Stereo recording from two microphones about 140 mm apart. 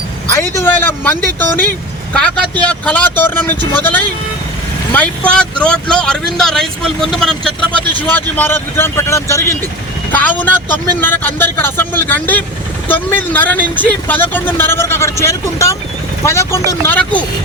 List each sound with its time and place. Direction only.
0.3 s speech: 15° left (ahead or behind)
4.9 s speech: 10° left (ahead or behind)